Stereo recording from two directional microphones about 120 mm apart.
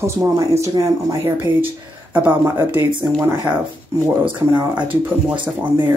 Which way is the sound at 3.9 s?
25° right (ahead or behind).